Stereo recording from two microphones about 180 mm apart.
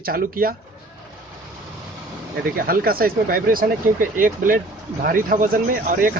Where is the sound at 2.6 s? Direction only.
55° right (ahead or behind).